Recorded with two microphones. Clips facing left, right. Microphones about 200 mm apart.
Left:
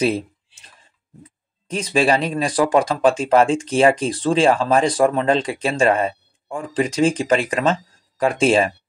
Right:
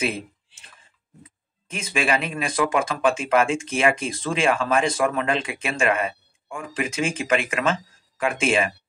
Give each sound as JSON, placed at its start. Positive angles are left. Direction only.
{"t": 0.0, "sound": "speech", "side_deg": 35}
{"t": 1.7, "sound": "speech", "side_deg": 35}